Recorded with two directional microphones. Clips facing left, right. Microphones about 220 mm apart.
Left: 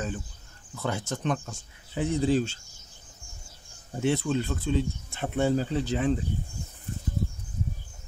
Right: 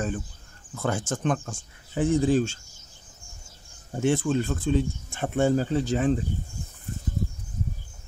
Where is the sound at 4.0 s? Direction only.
50° right (ahead or behind).